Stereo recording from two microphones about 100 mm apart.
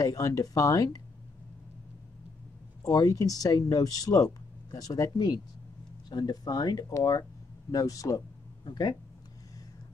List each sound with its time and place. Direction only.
0.0 s speech: 40° left (ahead or behind)
2.8 s speech: 35° left (ahead or behind)